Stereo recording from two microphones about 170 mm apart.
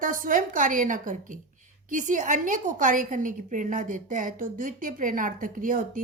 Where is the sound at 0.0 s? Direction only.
55° right (ahead or behind).